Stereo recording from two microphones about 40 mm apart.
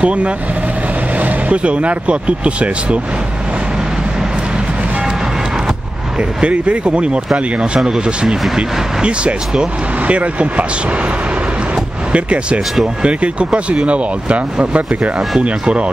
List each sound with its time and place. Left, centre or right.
0.0 s speech: right
6.4 s speech: right
12.1 s speech: right